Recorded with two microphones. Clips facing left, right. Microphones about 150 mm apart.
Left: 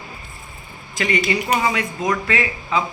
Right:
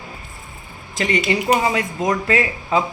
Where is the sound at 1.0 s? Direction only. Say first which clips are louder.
Right 1 dB; 35° right (ahead or behind).